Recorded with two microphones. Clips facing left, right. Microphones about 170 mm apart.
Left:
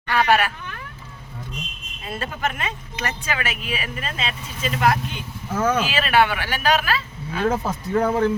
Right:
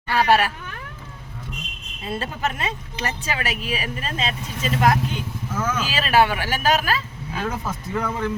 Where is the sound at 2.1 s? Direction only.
30° right (ahead or behind).